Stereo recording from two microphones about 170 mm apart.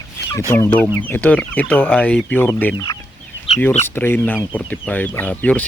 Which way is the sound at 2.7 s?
20° left (ahead or behind).